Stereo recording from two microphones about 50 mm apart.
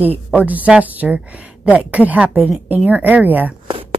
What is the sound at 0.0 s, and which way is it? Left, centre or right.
A woman's voice, right.